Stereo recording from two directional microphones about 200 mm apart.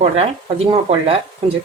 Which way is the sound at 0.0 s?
30° right (ahead or behind).